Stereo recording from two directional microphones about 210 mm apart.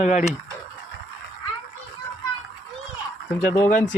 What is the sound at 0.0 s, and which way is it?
Speech, 35° left (ahead or behind).